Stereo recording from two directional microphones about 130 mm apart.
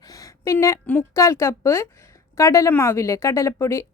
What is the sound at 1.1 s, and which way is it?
A woman's voice, 25° left (ahead or behind).